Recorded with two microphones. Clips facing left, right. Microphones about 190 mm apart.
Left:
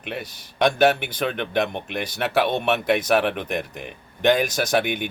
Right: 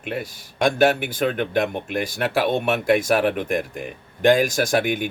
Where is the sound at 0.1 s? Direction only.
50° right (ahead or behind).